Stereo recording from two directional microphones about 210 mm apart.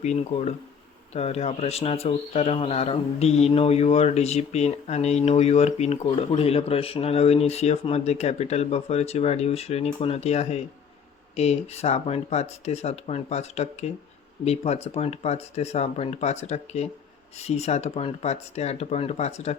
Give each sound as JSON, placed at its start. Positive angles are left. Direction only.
{"t": 0.0, "sound": "speech", "side_deg": 30}